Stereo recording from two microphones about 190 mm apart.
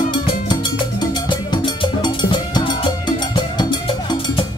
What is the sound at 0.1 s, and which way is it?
Music, 25° left (ahead or behind).